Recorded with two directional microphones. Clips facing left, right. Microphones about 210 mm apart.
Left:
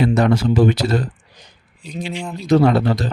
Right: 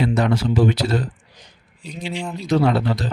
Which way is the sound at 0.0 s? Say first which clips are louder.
Left 4 dB; 45° left (ahead or behind).